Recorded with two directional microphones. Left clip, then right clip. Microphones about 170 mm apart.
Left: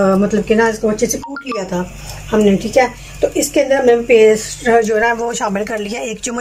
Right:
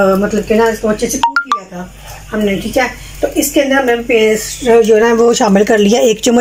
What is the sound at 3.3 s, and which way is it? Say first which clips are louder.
Speech: right 3 dB; 15° left (ahead or behind).